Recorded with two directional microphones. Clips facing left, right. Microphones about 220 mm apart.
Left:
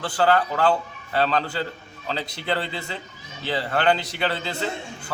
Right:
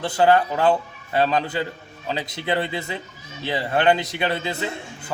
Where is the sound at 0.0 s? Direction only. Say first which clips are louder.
Right 3 dB; 20° right (ahead or behind).